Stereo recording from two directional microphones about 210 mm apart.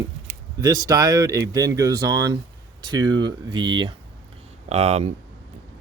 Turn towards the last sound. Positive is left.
turn(degrees=-30)  # may be behind; listen again after turning